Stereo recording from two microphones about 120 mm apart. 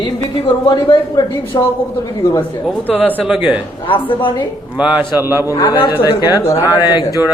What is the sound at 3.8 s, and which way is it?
Speech, 45° left (ahead or behind).